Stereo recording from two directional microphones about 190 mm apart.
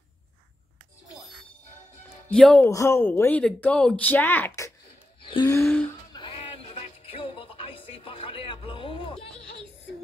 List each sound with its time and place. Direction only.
2.0 s speech: 5° left (ahead or behind)
5.3 s gasp: 20° left (ahead or behind)
6.1 s music: 30° left (ahead or behind)